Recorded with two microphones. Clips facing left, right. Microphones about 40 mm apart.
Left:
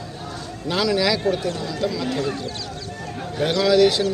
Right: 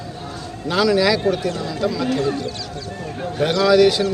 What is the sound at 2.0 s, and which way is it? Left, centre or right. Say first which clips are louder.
Speech: right 4 dB; right.